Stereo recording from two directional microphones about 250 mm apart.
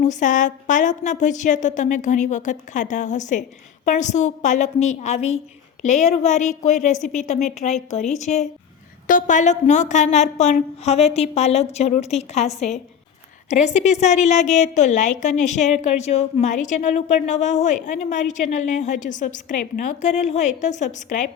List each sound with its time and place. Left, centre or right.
0.0 s a woman's voice: left